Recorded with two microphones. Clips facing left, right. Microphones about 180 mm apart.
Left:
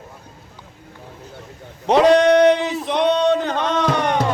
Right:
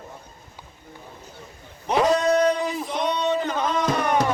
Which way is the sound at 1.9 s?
70° left (ahead or behind).